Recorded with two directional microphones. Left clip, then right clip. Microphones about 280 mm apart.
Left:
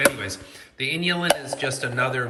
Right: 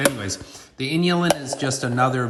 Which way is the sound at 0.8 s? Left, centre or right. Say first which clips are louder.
Right 2 dB; centre.